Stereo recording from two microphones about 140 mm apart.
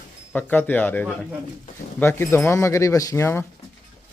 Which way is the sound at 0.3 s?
10° left (ahead or behind).